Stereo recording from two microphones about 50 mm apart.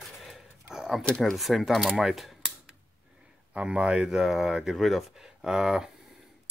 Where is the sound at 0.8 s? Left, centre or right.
Centre.